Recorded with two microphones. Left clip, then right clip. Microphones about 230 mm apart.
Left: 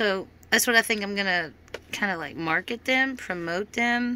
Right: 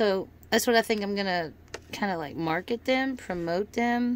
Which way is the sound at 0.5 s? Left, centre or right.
Centre.